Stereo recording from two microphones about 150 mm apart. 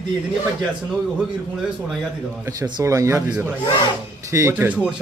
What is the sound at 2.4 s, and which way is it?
A man's voice, 25° right (ahead or behind).